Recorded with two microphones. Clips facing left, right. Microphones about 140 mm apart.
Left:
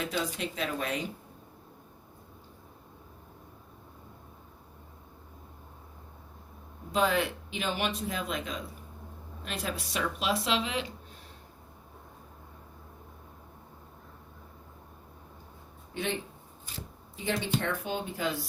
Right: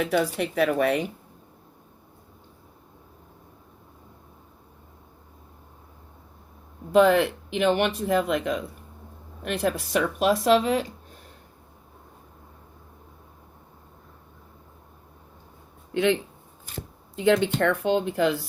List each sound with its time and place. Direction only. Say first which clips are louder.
0.0 s speech: right 9 dB; 60° right (ahead or behind)
6.9 s speech: right 10 dB; 60° right (ahead or behind)
16.6 s shuffling cards: right 6 dB; 55° right (ahead or behind)
17.2 s speech: right 10 dB; 70° right (ahead or behind)